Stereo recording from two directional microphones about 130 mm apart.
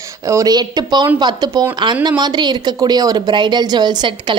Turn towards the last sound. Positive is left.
turn(degrees=-35)  # may be behind; listen again after turning